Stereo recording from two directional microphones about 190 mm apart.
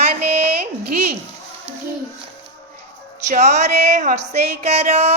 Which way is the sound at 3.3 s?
35° right (ahead or behind).